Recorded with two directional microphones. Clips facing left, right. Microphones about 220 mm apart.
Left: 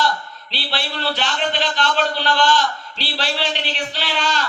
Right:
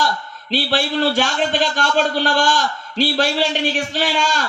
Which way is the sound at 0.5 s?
45° right (ahead or behind).